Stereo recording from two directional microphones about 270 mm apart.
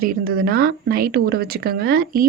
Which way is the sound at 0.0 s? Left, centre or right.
Right.